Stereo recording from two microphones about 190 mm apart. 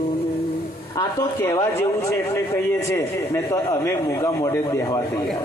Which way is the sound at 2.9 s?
15° left (ahead or behind).